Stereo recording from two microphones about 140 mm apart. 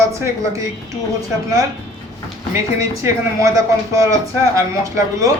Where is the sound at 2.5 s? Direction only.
20° right (ahead or behind).